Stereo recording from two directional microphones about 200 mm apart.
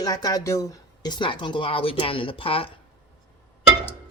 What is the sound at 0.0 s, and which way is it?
Speech, 20° left (ahead or behind).